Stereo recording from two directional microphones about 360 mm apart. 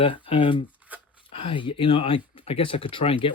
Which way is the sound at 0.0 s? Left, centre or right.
Centre.